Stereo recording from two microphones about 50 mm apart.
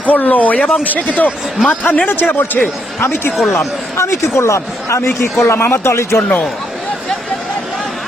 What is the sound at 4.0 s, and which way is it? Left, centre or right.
Speech, left.